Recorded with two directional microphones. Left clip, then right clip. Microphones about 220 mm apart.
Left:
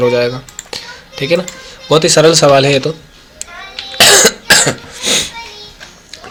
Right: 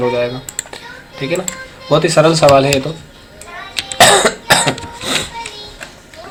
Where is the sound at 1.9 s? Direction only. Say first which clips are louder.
Left 3 dB; 40° left (ahead or behind).